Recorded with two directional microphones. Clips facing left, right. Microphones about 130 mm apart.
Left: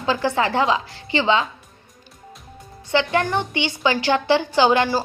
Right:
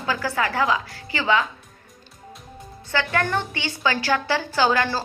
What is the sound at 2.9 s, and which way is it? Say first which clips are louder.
A woman's voice: left 4 dB; 20° left (ahead or behind).